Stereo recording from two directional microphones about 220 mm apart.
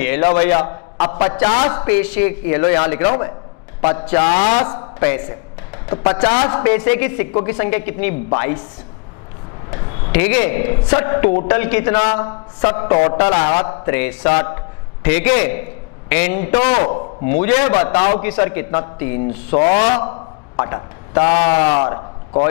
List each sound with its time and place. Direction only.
0.0 s a sound: 15° left (ahead or behind)
0.4 s speech: 15° left (ahead or behind)
1.0 s a man's voice: 30° left (ahead or behind)
1.7 s speech: 10° left (ahead or behind)
9.7 s a man's voice: 15° left (ahead or behind)
12.9 s speech: 25° left (ahead or behind)
17.9 s speech: 30° left (ahead or behind)
18.2 s speech: 10° left (ahead or behind)
19.5 s speech: 30° left (ahead or behind)
20.5 s a sound: 15° left (ahead or behind)
21.2 s speech: 30° left (ahead or behind)